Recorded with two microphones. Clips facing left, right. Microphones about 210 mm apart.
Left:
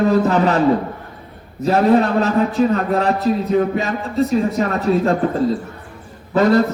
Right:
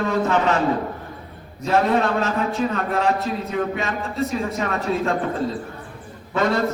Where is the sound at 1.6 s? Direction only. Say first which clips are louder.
Left 5 dB; 35° left (ahead or behind).